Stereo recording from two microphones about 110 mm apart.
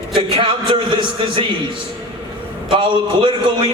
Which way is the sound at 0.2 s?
50° right (ahead or behind).